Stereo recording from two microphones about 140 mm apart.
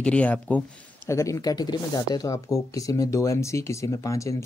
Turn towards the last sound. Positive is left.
turn(degrees=20)  # may be behind; listen again after turning